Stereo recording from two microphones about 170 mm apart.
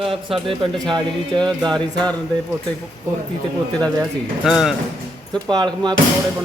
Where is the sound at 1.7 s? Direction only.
5° left (ahead or behind).